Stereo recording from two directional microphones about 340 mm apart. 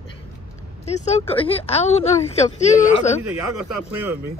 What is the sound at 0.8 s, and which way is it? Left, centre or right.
Speech, centre.